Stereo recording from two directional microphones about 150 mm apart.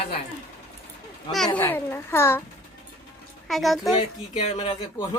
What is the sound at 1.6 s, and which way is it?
Speech, 15° left (ahead or behind).